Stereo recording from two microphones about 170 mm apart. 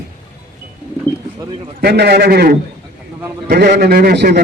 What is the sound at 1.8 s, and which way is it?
A man's voice, 70° right (ahead or behind).